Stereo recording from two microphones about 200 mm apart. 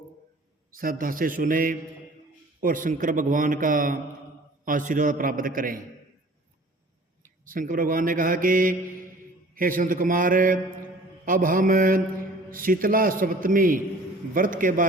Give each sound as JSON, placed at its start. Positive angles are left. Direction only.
{"t": 0.8, "sound": "a man's voice", "side_deg": -45}
{"t": 7.2, "sound": "mantra", "side_deg": -45}
{"t": 9.6, "sound": "a man's voice", "side_deg": -45}